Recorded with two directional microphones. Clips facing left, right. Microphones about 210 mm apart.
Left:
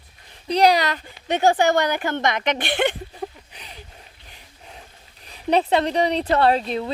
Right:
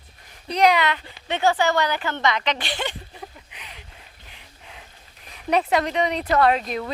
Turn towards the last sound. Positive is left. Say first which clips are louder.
# left 1 dB
turn(degrees=30)  # may be behind; listen again after turning